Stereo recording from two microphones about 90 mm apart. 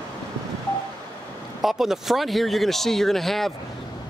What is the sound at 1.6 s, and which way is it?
Speech, 5° right (ahead or behind).